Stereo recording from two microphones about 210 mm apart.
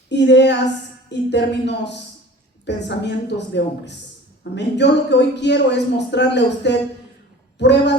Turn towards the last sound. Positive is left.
turn(degrees=55)  # may be behind; listen again after turning